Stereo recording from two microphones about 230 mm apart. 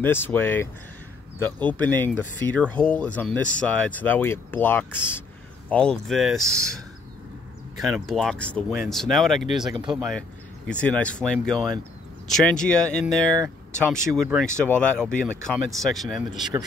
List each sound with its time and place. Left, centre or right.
0.0 s speech: centre
7.7 s speech: centre
9.6 s speech: right
9.9 s speech: centre